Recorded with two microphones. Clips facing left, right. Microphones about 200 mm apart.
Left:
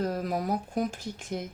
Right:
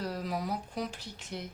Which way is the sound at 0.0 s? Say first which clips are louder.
Left 5 dB; 50° left (ahead or behind).